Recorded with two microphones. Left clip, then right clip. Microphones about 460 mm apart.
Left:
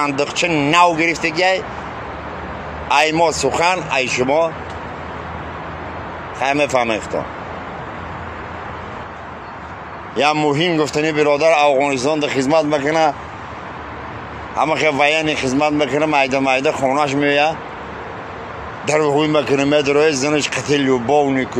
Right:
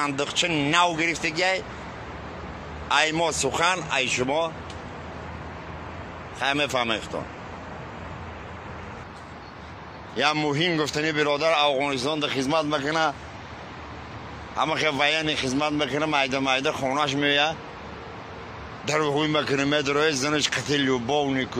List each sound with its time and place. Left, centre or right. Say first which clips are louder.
0.0 s a man's voice: left 7 dB; left
2.9 s a man's voice: left 8 dB; left
6.4 s a man's voice: left 8 dB; left
10.1 s a man's voice: left 8 dB; left
14.5 s a man's voice: left 8 dB; left
18.9 s a man's voice: left 8 dB; left